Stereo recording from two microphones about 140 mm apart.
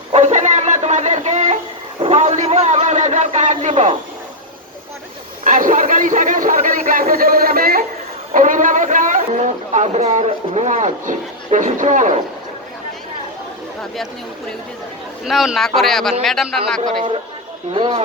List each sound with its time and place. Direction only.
0.1 s a sound: 55° right (ahead or behind)
3.7 s a man's voice: 45° right (ahead or behind)
5.5 s speech: 70° right (ahead or behind); by 7.9 s 90° right
8.3 s speech: 70° right (ahead or behind)
15.2 s speech: centre (ahead or behind)
17.7 s speech: 35° right (ahead or behind)